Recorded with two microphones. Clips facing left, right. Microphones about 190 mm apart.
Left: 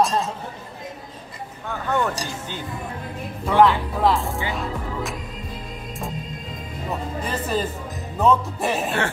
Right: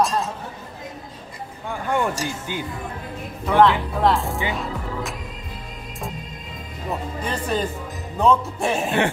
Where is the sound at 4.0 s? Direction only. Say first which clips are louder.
Even; centre (ahead or behind).